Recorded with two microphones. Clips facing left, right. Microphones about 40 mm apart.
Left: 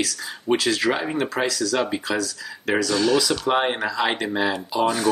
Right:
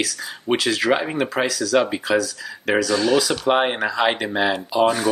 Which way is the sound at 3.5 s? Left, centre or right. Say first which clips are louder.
Right 4 dB; right.